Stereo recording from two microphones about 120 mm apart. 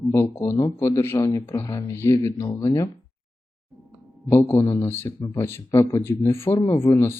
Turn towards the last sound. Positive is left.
turn(degrees=25)  # may be behind; listen again after turning